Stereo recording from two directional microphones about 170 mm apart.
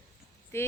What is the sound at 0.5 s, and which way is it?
Speech, 15° left (ahead or behind).